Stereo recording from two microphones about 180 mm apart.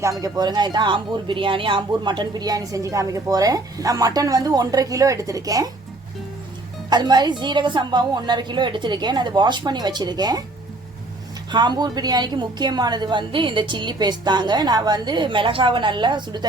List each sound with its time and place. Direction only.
0.0 s speech: 20° right (ahead or behind)
6.9 s speech: 25° right (ahead or behind)
11.5 s speech: 25° right (ahead or behind)